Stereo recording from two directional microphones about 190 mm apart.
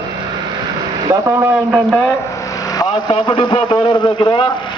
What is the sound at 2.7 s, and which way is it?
A man's voice, 25° left (ahead or behind).